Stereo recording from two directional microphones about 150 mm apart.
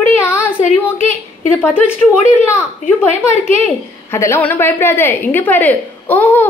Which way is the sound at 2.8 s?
55° left (ahead or behind).